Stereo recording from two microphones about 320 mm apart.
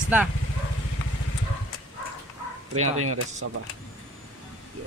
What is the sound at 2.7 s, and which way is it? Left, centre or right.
Speech, right.